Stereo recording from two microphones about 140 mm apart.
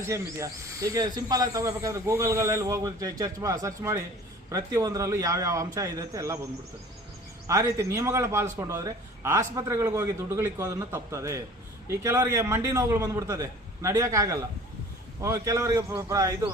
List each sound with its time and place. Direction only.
0.0 s speech: 20° right (ahead or behind)
7.4 s speech: 20° right (ahead or behind)